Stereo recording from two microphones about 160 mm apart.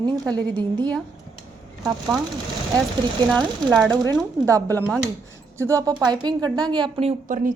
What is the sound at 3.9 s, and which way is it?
A woman's voice, 25° right (ahead or behind).